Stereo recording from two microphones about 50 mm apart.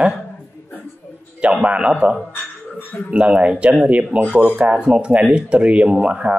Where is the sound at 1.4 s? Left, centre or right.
Right.